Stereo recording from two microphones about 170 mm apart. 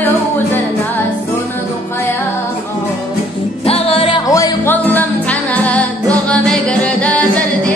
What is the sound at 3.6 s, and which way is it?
Music, 35° left (ahead or behind).